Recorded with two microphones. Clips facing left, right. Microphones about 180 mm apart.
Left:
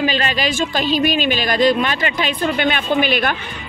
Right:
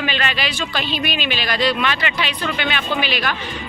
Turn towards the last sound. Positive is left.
turn(degrees=50)  # may be behind; listen again after turning